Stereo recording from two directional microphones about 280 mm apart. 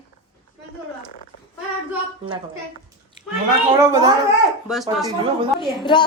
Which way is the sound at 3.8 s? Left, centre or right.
Centre.